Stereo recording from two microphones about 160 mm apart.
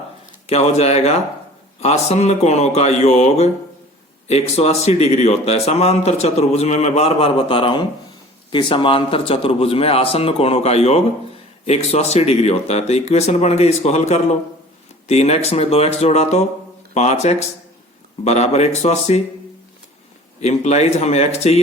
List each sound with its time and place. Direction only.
0.4 s speech: 40° left (ahead or behind)
20.4 s speech: 45° left (ahead or behind)